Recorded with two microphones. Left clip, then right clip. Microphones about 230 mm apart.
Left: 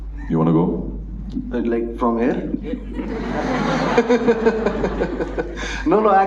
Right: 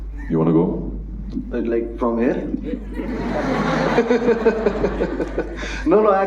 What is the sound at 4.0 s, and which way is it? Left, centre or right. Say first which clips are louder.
Speech: left 2 dB; left.